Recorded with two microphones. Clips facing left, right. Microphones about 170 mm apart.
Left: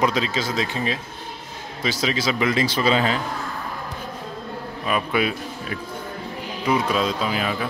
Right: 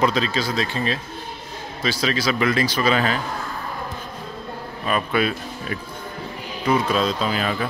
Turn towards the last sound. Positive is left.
turn(degrees=10)  # may be behind; listen again after turning